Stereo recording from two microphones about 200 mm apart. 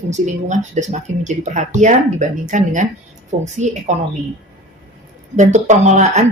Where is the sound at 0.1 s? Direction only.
35° right (ahead or behind).